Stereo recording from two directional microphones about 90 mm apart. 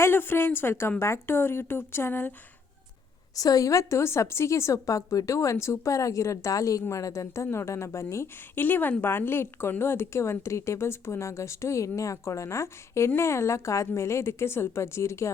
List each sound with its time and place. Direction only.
0.0 s a woman's voice: 25° left (ahead or behind)
3.3 s a woman's voice: 40° left (ahead or behind)